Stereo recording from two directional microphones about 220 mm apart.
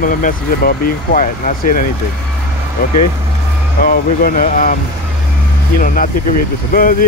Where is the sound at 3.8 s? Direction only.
40° left (ahead or behind).